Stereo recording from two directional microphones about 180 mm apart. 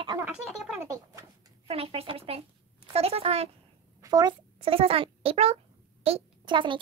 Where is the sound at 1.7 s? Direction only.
35° right (ahead or behind).